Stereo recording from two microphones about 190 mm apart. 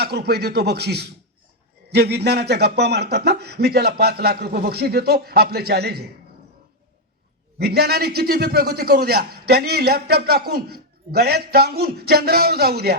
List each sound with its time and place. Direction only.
0.0 s a man's voice: 60° right (ahead or behind)
7.6 s a man's voice: 55° right (ahead or behind)